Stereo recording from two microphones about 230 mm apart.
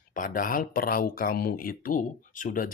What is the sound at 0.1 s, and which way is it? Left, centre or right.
Speech, left.